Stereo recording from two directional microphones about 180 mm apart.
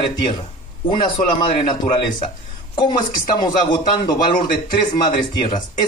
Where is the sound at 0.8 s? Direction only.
30° left (ahead or behind).